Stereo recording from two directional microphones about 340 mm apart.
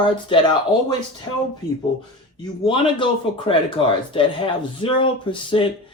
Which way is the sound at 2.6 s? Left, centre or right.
Centre.